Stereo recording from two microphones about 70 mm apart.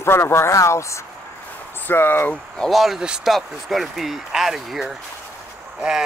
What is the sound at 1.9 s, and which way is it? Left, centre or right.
Speech, left.